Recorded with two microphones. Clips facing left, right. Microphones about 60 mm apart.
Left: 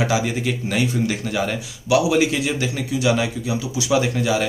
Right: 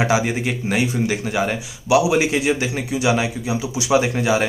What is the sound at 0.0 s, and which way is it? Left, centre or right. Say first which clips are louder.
Speech: right 2 dB; right.